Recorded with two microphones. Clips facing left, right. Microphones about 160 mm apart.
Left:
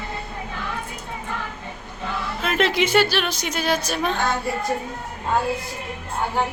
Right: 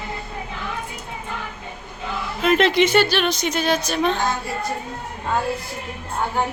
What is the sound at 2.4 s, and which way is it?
A woman's voice, 5° left (ahead or behind).